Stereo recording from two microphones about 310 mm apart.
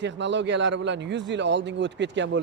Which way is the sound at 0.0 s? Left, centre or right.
Right.